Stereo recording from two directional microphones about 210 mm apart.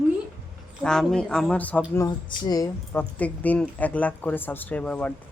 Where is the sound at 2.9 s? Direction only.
5° left (ahead or behind).